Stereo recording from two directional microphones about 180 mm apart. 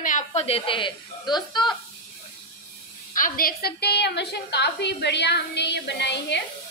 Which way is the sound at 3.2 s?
50° left (ahead or behind).